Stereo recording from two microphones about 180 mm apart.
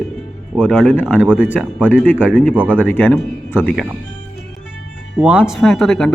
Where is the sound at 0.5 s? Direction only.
5° left (ahead or behind).